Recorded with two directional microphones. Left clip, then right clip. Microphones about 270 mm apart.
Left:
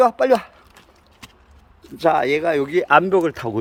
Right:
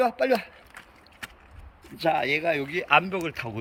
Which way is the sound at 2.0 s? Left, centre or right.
Centre.